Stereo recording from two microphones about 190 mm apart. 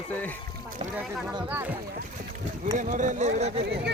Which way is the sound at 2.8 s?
40° right (ahead or behind).